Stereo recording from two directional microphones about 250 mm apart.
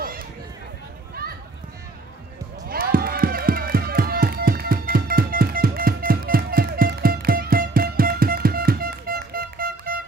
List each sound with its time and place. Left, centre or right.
2.7 s music: right